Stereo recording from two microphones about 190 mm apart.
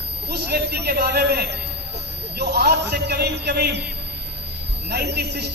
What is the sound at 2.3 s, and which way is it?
A man's voice, 60° right (ahead or behind).